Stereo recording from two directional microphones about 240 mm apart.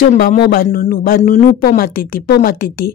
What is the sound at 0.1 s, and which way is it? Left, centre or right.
Speech, left.